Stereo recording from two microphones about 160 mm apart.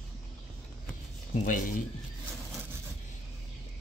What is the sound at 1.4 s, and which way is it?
Speech, 60° left (ahead or behind).